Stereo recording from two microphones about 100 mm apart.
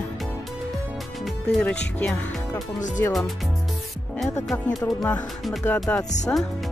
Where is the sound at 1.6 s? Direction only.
10° left (ahead or behind).